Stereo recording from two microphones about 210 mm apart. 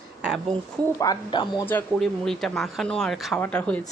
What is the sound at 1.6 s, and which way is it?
Speech, 5° left (ahead or behind).